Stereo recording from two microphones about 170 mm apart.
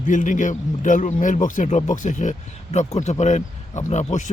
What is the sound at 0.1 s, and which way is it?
A man's voice, 50° left (ahead or behind).